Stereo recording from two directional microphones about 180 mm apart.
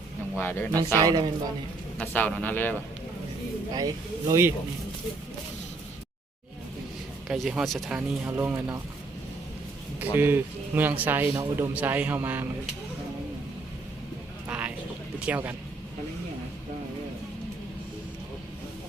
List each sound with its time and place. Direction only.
0.3 s speech: 10° left (ahead or behind)
1.0 s a woman's voice: 25° right (ahead or behind)
2.0 s speech: 10° left (ahead or behind)
3.8 s a man's voice: 20° right (ahead or behind)
7.3 s speech: 5° right (ahead or behind)
10.0 s a man's voice: 10° right (ahead or behind)
14.4 s a sound: 5° right (ahead or behind)
15.2 s a man's voice: 10° right (ahead or behind)